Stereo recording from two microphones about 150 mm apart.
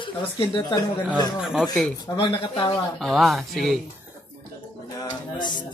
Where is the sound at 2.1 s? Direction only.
35° left (ahead or behind).